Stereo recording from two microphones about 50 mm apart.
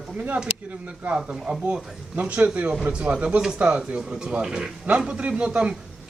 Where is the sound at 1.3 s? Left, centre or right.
Centre.